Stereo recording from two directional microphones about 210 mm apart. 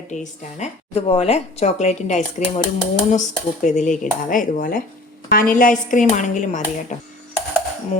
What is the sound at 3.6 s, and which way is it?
Speech, 35° left (ahead or behind).